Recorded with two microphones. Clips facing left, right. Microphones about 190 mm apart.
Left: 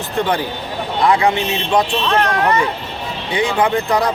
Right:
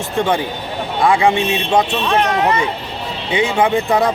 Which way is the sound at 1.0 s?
25° right (ahead or behind).